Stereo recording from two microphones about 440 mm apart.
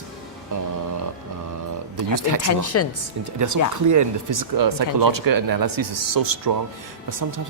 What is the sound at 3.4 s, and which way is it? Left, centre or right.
Speech, right.